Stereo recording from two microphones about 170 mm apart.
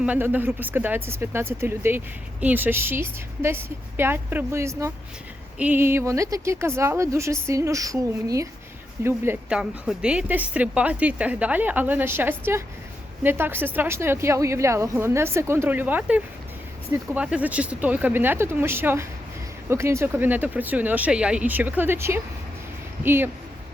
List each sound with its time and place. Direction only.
0.0 s a woman's voice: 10° right (ahead or behind)